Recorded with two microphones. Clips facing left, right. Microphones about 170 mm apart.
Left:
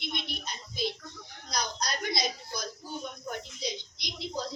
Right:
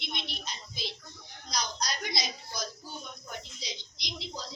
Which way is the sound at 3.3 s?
55° left (ahead or behind).